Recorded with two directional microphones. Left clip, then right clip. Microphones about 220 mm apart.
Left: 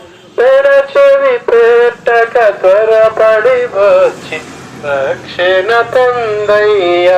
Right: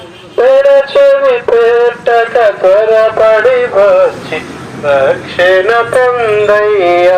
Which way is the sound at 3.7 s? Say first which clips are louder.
Right 1 dB; 10° left (ahead or behind).